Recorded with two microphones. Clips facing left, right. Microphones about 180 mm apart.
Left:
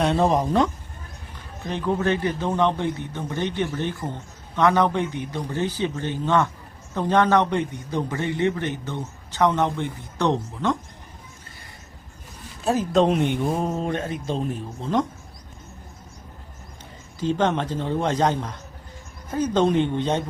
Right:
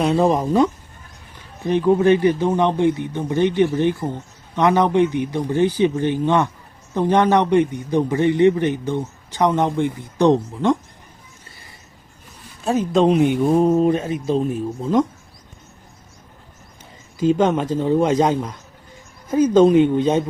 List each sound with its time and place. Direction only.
0.0 s speech: centre (ahead or behind)
1.6 s a man's voice: 15° right (ahead or behind)
12.6 s speech: centre (ahead or behind)
17.2 s a man's voice: 10° right (ahead or behind)